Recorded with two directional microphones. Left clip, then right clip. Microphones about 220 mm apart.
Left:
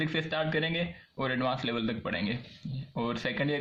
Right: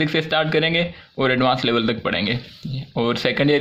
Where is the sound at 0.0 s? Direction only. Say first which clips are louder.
Right 11 dB; 40° right (ahead or behind).